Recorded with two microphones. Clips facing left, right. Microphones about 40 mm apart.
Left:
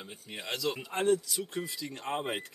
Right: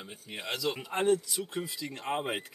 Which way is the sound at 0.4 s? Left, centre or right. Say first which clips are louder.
Right 1 dB; centre.